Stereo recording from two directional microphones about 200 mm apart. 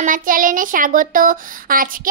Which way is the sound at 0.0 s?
45° right (ahead or behind).